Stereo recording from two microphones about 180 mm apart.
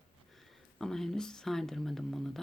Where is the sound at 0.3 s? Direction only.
Centre (ahead or behind).